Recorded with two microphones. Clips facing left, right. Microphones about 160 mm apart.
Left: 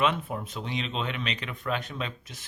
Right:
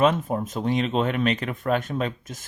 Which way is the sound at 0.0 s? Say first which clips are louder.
Right 6 dB; 40° right (ahead or behind).